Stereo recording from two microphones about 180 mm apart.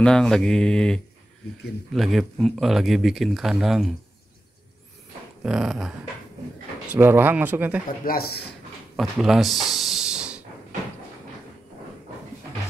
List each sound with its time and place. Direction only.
0.0 s speech: 5° left (ahead or behind)
5.4 s speech: centre (ahead or behind)
8.0 s speech: 55° left (ahead or behind)
8.9 s speech: centre (ahead or behind)
9.7 s a sound: centre (ahead or behind)